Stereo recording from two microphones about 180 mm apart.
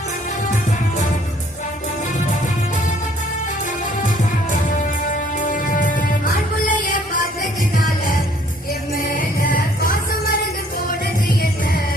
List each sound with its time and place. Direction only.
5.1 s music: 45° left (ahead or behind)
9.1 s music: 50° left (ahead or behind)